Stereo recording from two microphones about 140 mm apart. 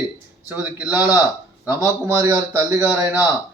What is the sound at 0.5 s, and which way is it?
Speech, 10° right (ahead or behind).